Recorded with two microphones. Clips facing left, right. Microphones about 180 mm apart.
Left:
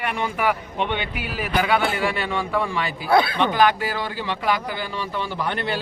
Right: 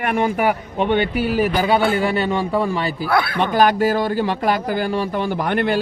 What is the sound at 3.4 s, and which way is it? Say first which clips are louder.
Speech: right 3 dB; 45° right (ahead or behind).